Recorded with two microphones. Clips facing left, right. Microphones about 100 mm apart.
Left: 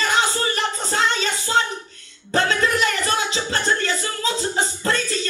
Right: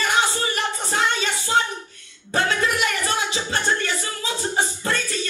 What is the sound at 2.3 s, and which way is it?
Music, 15° right (ahead or behind).